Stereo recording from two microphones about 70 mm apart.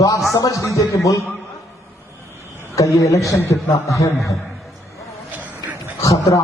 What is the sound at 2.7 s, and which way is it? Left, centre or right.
A man's voice, left.